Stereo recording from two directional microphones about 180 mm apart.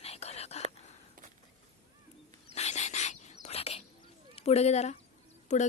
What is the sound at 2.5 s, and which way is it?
Bird, 40° left (ahead or behind).